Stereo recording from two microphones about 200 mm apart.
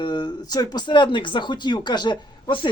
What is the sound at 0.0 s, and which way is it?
Speech, 20° left (ahead or behind).